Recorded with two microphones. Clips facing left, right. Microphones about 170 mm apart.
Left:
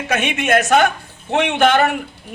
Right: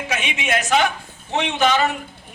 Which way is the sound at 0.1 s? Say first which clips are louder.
Left 7 dB; 50° left (ahead or behind).